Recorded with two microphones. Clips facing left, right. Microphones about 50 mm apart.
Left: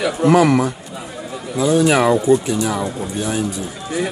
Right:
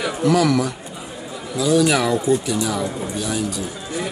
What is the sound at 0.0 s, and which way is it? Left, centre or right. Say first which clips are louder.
Speech: left 4 dB; left.